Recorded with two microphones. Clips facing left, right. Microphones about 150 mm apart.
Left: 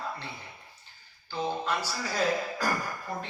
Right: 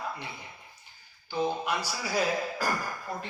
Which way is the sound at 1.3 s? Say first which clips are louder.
Right 1 dB; 10° right (ahead or behind).